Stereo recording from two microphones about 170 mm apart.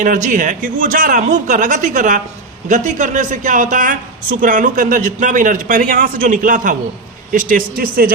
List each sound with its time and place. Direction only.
0.0 s a woman's voice: 50° right (ahead or behind)